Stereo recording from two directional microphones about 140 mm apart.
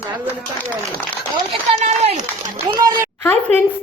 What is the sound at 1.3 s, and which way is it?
Speech, 50° right (ahead or behind).